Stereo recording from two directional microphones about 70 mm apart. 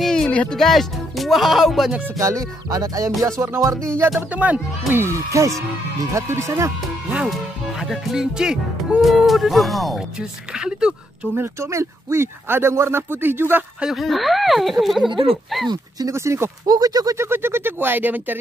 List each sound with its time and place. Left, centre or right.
0.0 s music: centre
0.3 s speech: centre
0.6 s speech: centre
2.1 s music: right
3.2 s speech: right
4.3 s speech: right
4.9 s speech: right
7.2 s speech: centre
10.5 s speech: centre
11.3 s speech: right
13.9 s speech: centre
16.1 s speech: right
16.6 s music: right
17.2 s speech: right